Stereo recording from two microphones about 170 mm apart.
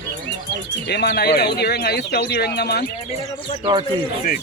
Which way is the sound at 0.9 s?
80° left.